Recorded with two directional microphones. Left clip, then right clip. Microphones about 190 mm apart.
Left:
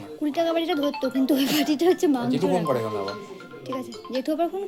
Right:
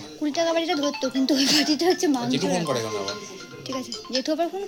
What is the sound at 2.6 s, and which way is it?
Speech, 45° left (ahead or behind).